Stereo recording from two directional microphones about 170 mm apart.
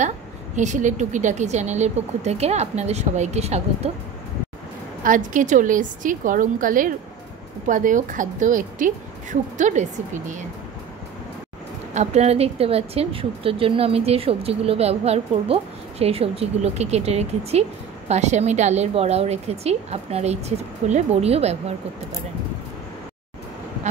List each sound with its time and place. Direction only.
0.6 s a woman's voice: 45° right (ahead or behind)
5.0 s a woman's voice: 50° right (ahead or behind)
11.9 s a woman's voice: 40° right (ahead or behind)